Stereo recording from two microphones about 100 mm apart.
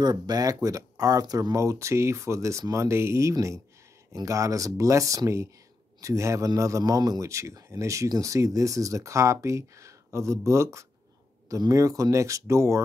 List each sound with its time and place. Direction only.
0.0 s speech: 40° right (ahead or behind)